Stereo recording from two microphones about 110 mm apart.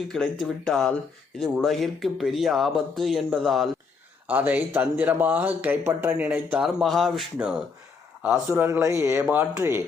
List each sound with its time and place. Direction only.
0.1 s speech: centre (ahead or behind)
4.3 s speech: 15° right (ahead or behind)
6.6 s speech: centre (ahead or behind)
8.4 s speech: 20° right (ahead or behind)